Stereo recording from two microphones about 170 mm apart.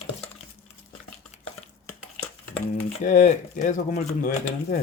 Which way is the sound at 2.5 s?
45° left (ahead or behind).